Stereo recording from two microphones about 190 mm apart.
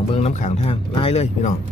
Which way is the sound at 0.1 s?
35° left (ahead or behind).